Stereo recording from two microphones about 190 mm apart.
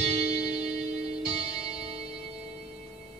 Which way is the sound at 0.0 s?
35° right (ahead or behind).